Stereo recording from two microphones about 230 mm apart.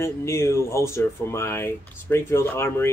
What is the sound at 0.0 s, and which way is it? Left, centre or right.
Speech, centre.